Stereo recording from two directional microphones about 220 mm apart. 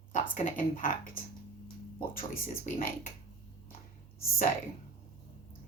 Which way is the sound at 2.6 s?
40° left (ahead or behind).